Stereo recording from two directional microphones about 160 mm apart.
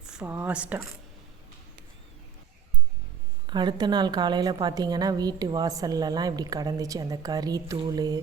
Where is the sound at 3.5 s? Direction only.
30° right (ahead or behind).